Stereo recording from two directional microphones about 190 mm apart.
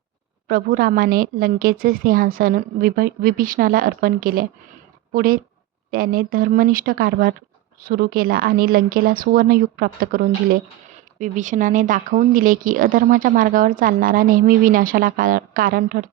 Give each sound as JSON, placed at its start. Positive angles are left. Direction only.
{"t": 0.4, "sound": "speech", "side_deg": -50}